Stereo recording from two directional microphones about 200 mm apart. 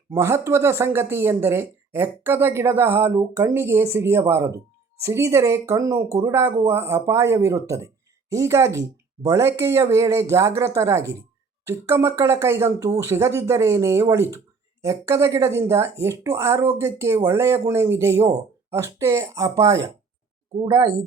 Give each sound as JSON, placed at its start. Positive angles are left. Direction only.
{"t": 0.1, "sound": "speech", "side_deg": -15}